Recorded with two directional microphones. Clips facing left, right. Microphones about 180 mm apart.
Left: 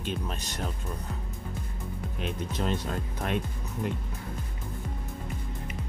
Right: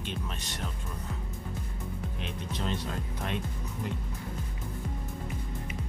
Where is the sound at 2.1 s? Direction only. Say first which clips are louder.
Left 4 dB; 45° left (ahead or behind).